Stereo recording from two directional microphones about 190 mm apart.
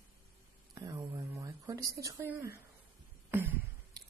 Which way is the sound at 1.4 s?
15° right (ahead or behind).